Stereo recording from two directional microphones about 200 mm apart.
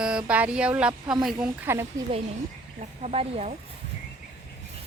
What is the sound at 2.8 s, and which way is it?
Speech, 35° right (ahead or behind).